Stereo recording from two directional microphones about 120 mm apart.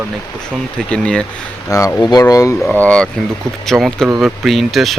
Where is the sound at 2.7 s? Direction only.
10° left (ahead or behind).